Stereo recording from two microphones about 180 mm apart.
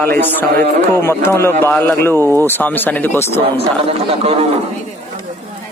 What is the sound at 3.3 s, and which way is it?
Speech, 30° right (ahead or behind).